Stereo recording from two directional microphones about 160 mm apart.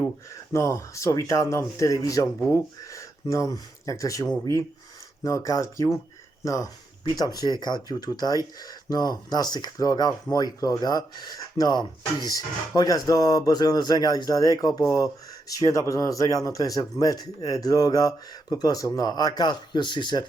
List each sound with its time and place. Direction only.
0.5 s speech: 20° left (ahead or behind)